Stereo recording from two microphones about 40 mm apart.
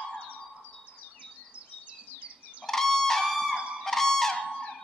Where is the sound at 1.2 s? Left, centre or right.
Right.